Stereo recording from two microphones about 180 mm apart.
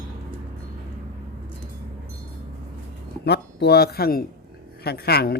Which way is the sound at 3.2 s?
65° left (ahead or behind).